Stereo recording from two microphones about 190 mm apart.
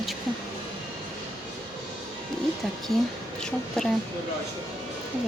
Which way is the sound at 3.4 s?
5° left (ahead or behind).